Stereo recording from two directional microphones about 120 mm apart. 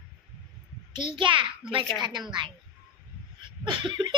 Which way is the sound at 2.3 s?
40° right (ahead or behind).